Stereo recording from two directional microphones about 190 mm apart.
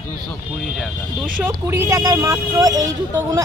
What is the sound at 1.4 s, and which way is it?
Speech, 15° right (ahead or behind).